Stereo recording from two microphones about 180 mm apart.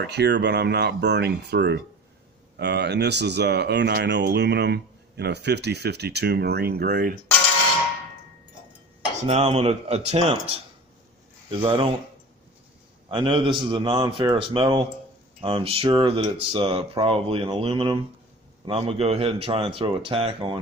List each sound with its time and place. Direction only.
0.0 s speech: 70° right (ahead or behind)
9.2 s speech: 35° right (ahead or behind)
11.6 s speech: 30° right (ahead or behind)
13.1 s a man's voice: 30° right (ahead or behind)